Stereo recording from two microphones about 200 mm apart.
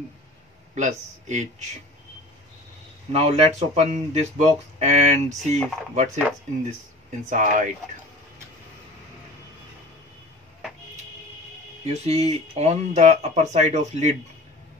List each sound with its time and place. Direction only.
0.7 s speech: 35° right (ahead or behind)
3.1 s speech: 30° right (ahead or behind)
7.2 s speech: 40° right (ahead or behind)
11.8 s speech: 35° right (ahead or behind)